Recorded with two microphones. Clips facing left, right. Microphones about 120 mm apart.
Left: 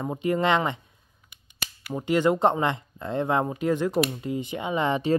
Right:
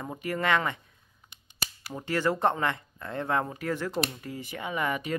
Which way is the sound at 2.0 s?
20° left (ahead or behind).